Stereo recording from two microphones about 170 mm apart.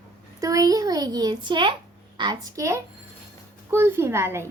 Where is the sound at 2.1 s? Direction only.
25° right (ahead or behind).